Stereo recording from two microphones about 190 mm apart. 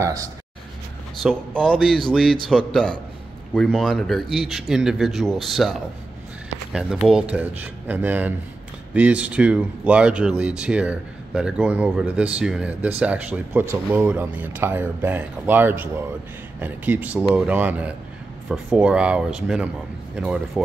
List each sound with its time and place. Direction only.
0.0 s speech: 20° right (ahead or behind)
1.2 s speech: 5° left (ahead or behind)